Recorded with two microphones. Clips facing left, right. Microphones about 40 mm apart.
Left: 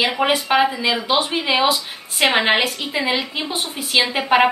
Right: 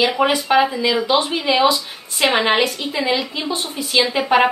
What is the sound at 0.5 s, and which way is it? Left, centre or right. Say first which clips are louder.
A woman's voice: right 2 dB; left.